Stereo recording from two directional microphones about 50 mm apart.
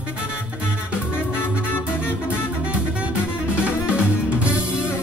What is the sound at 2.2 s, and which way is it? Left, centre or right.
Music, right.